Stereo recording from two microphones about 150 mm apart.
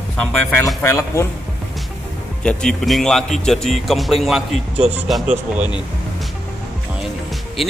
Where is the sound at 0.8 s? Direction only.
20° left (ahead or behind).